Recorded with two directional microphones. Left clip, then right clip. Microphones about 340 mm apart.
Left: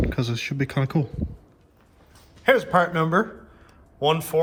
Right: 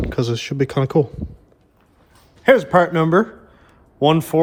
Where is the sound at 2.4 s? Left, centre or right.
Right.